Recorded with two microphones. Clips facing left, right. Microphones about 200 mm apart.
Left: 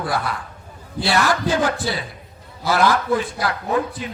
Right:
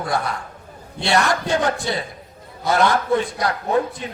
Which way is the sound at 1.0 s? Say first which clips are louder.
Even; centre (ahead or behind).